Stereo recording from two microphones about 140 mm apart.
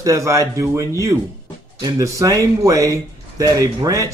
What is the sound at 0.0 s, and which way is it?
Speech, 20° right (ahead or behind).